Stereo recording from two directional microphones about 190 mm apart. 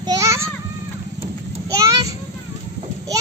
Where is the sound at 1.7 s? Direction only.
15° right (ahead or behind).